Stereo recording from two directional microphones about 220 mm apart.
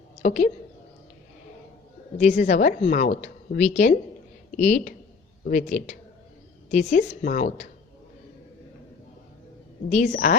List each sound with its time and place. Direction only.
0.2 s a woman's voice: 35° left (ahead or behind)
2.1 s a woman's voice: 35° left (ahead or behind)
9.9 s a woman's voice: 35° left (ahead or behind)